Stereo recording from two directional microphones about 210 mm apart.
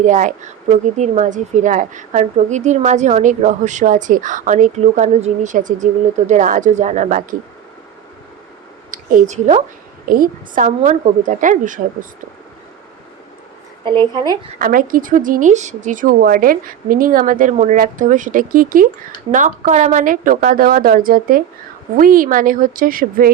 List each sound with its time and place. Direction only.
0.0 s speech: 35° right (ahead or behind)
8.9 s a woman's voice: 40° right (ahead or behind)
13.8 s a woman's voice: 25° right (ahead or behind)
14.6 s speech: 40° right (ahead or behind)